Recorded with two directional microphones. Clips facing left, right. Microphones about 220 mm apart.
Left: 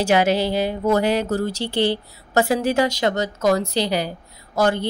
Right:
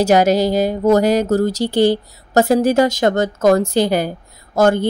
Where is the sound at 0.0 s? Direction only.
40° right (ahead or behind).